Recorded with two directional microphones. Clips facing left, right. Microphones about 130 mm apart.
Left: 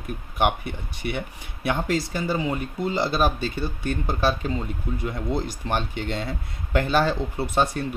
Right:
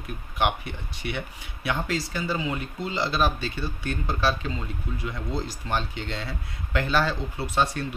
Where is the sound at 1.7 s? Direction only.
50° left (ahead or behind).